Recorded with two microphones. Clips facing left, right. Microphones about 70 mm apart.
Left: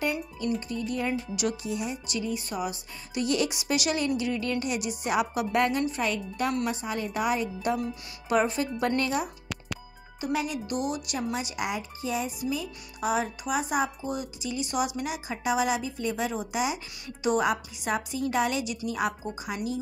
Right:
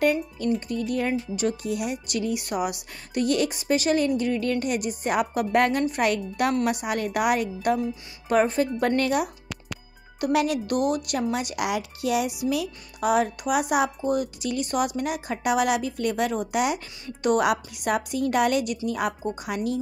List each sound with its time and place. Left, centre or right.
0.6 s a woman's voice: right
1.3 s speech: right
1.6 s speech: right
3.2 s a woman's voice: right
6.0 s a woman's voice: right
8.3 s a woman's voice: right
10.2 s speech: right
10.7 s a woman's voice: right